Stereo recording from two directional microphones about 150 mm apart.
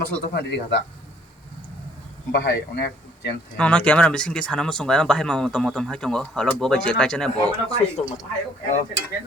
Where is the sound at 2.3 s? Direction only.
90° left.